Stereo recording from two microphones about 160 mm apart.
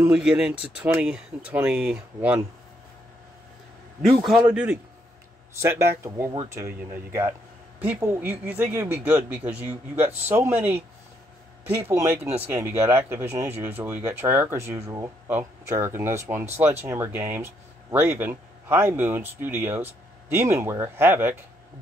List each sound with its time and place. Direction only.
0.0 s speech: 5° right (ahead or behind)
4.3 s a man's voice: 5° right (ahead or behind)